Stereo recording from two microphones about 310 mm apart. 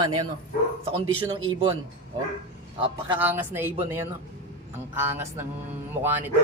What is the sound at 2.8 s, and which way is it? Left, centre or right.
Speech, centre.